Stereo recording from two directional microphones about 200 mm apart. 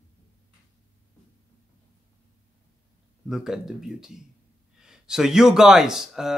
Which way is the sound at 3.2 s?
Centre (ahead or behind).